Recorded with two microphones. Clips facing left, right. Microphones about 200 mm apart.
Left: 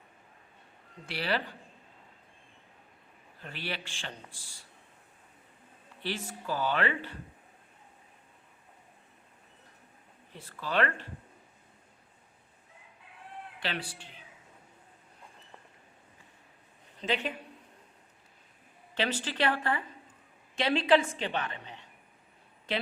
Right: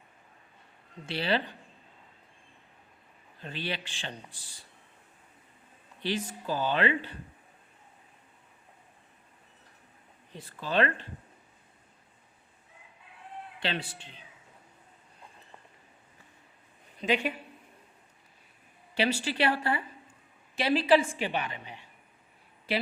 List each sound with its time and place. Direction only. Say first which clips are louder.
1.0 s a man's voice: right 3 dB; 25° right (ahead or behind)
3.4 s a man's voice: right 3 dB; 20° right (ahead or behind)
6.0 s a woman's voice: right 4 dB; 15° right (ahead or behind)
10.3 s a woman's voice: right 2 dB; 15° right (ahead or behind)
13.6 s a man's voice: right 3 dB; 25° right (ahead or behind)
17.0 s a woman's voice: right 4 dB; 10° right (ahead or behind)
18.9 s a woman's voice: right 3 dB; 10° right (ahead or behind)